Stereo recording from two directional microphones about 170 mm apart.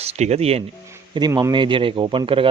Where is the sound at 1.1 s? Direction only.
25° right (ahead or behind).